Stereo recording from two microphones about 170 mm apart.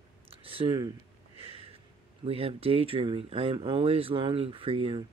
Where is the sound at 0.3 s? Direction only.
30° right (ahead or behind).